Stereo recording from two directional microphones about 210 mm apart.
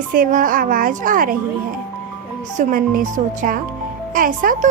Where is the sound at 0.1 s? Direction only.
40° right (ahead or behind).